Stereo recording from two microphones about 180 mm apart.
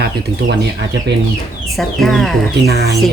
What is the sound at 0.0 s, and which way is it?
Speech, 65° right (ahead or behind).